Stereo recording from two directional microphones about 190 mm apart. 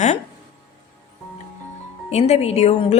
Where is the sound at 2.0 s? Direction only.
35° left (ahead or behind).